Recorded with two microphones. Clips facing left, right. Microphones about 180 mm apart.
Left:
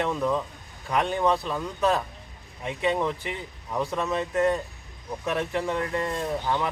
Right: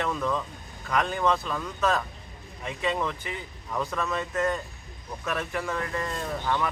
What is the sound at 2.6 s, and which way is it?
Speech, 30° left (ahead or behind).